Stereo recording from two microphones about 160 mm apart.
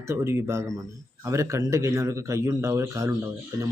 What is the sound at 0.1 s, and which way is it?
A man's voice, 15° right (ahead or behind).